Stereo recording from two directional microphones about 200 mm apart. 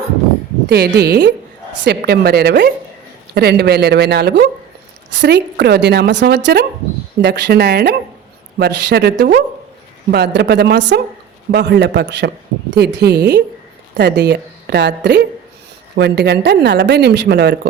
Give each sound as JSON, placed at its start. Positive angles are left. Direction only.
{"t": 0.7, "sound": "a woman's voice", "side_deg": -55}